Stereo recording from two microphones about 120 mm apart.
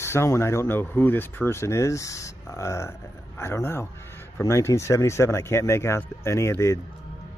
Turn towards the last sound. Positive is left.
turn(degrees=20)  # may be behind; listen again after turning